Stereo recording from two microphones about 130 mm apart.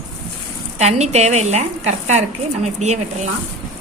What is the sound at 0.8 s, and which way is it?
A woman's voice, 60° right (ahead or behind).